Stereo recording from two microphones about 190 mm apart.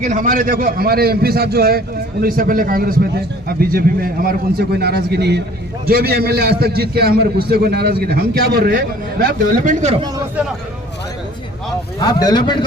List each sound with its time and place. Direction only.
0.0 s a man's voice: 45° right (ahead or behind)
11.9 s speech: 20° left (ahead or behind)